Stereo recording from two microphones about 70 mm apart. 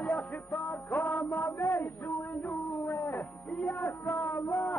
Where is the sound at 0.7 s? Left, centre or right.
Left.